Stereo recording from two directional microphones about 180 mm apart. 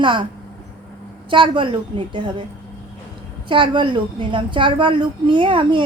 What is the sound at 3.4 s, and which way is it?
A woman's voice, 30° right (ahead or behind).